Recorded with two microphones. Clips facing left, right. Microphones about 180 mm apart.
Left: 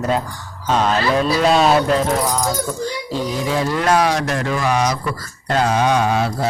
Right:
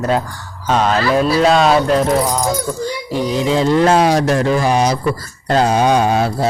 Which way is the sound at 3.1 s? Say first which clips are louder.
Right 5 dB; 20° right (ahead or behind).